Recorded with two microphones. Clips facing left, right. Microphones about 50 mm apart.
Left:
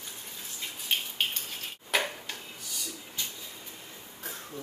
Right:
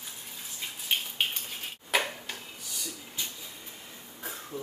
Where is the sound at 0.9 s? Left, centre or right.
Centre.